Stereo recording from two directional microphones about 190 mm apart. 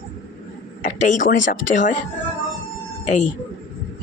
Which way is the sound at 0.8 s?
40° left (ahead or behind).